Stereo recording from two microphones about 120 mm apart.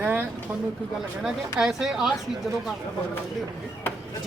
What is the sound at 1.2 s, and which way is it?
Speech, 5° right (ahead or behind).